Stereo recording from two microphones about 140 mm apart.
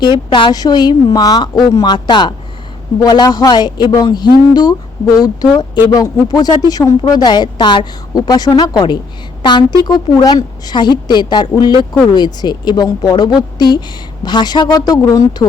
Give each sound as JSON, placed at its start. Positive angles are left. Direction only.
{"t": 0.0, "sound": "a woman's voice", "side_deg": 35}